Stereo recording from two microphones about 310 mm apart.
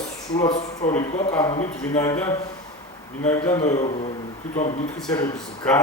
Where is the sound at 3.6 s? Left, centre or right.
Left.